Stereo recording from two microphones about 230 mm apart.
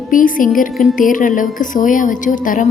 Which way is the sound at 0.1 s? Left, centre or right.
Left.